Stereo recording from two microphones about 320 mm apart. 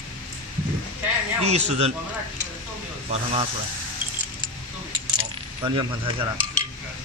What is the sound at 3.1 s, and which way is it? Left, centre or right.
Speech, centre.